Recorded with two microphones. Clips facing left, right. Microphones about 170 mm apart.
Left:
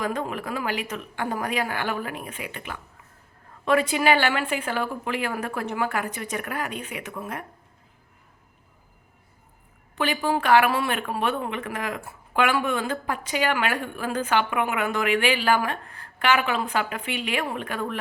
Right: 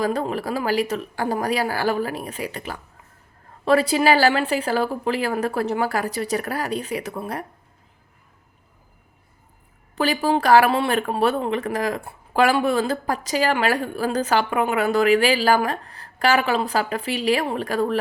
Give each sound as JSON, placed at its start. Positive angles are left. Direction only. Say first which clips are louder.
{"t": 0.0, "sound": "speech", "louder": "right 5 dB", "side_deg": -35}
{"t": 9.9, "sound": "speech", "louder": "right 4 dB", "side_deg": -35}